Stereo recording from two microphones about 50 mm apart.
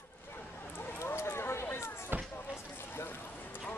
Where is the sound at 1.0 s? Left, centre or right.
Left.